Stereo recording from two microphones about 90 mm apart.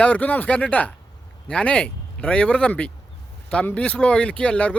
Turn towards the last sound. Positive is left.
turn(degrees=15)  # may be behind; listen again after turning